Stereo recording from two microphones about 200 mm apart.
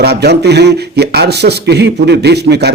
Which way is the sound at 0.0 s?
55° right (ahead or behind).